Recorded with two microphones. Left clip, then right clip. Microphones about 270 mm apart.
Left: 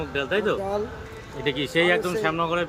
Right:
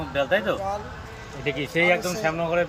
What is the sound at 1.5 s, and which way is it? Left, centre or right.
Speech, left.